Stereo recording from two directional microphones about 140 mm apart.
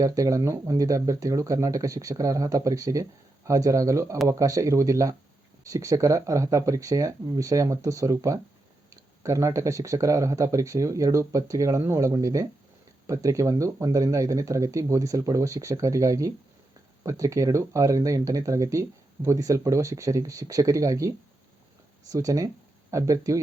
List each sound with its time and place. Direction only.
0.0 s speech: 25° right (ahead or behind)